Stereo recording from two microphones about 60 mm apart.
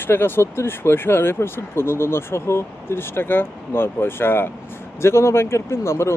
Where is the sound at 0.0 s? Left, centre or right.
Left.